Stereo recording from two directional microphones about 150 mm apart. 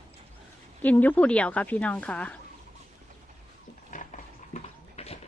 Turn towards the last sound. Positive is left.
turn(degrees=45)  # may be behind; listen again after turning